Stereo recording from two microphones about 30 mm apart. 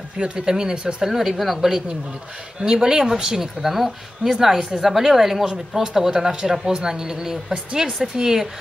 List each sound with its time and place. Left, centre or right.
0.2 s speech: right
1.4 s a woman's voice: centre
2.6 s speech: right
3.7 s a woman's voice: centre